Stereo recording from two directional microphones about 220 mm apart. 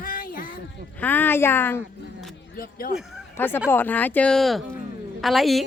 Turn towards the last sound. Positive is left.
turn(degrees=0)  # may be behind; listen again after turning